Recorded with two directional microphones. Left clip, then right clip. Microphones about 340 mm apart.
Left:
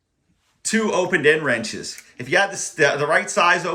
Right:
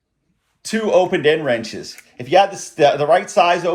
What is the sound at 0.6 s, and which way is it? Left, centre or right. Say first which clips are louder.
Speech: right 5 dB; centre.